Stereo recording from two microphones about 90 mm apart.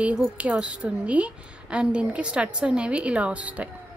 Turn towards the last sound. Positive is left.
turn(degrees=-15)  # may be behind; listen again after turning